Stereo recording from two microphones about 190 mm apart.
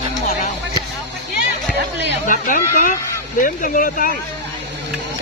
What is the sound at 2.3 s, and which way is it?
Speech, 45° left (ahead or behind).